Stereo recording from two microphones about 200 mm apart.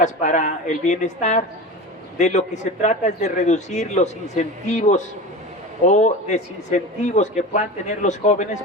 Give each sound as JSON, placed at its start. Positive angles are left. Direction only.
{"t": 0.0, "sound": "a man's voice", "side_deg": 40}